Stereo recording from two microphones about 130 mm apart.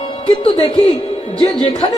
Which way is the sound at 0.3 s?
50° left (ahead or behind).